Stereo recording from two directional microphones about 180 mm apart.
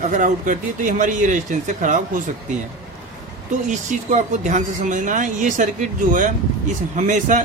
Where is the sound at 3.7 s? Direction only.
40° right (ahead or behind).